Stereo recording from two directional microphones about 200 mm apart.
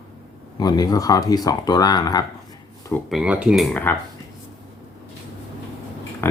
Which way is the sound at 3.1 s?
5° right (ahead or behind).